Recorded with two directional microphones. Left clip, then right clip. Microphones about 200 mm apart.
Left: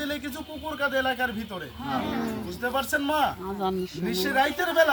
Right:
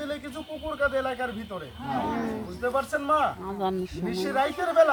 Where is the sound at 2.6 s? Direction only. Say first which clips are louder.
Even; 10° left (ahead or behind).